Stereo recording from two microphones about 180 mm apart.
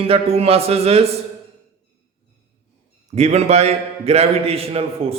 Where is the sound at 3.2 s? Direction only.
35° right (ahead or behind).